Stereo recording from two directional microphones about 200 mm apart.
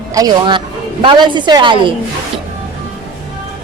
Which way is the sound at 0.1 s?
20° right (ahead or behind).